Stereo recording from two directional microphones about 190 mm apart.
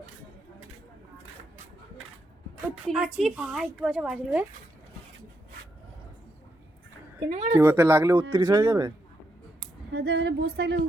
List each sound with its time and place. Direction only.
2.9 s a woman's voice: centre (ahead or behind)
7.3 s speech: 30° right (ahead or behind)
7.6 s speech: 10° right (ahead or behind)
9.9 s speech: 55° right (ahead or behind)